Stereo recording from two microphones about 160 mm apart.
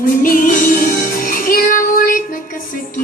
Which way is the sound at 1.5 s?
60° left (ahead or behind).